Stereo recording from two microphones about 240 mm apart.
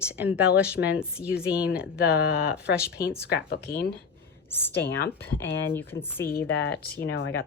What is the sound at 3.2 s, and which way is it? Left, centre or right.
Speech, left.